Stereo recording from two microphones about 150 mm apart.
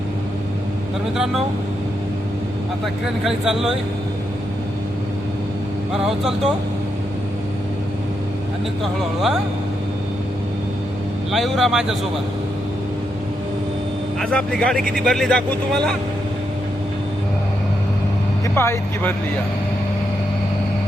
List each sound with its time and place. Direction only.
2.8 s speech: 5° right (ahead or behind)
5.9 s speech: 5° right (ahead or behind)
8.8 s speech: centre (ahead or behind)
11.3 s speech: centre (ahead or behind)
14.2 s speech: 5° left (ahead or behind)
18.5 s speech: 15° left (ahead or behind)